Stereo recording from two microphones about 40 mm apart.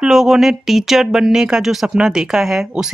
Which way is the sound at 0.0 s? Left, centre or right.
Centre.